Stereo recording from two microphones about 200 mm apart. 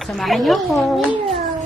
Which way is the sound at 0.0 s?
Centre (ahead or behind).